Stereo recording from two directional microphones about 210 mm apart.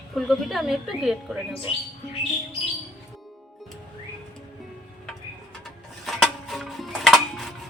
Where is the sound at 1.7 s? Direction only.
25° left (ahead or behind).